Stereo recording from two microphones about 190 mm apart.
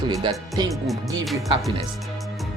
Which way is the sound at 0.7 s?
Centre (ahead or behind).